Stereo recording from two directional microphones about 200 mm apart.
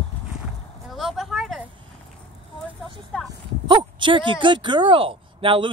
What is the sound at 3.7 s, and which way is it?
A woman's voice, 25° right (ahead or behind).